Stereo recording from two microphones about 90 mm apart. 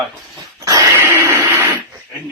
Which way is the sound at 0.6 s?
40° right (ahead or behind).